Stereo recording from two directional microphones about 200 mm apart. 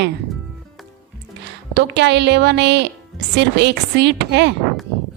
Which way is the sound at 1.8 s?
60° right (ahead or behind).